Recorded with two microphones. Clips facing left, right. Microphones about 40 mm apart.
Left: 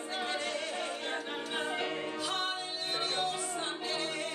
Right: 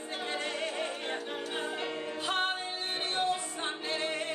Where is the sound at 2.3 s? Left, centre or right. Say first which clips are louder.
Right 6 dB; right.